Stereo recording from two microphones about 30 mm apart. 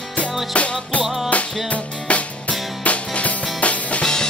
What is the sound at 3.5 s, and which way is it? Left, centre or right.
Drum kit, left.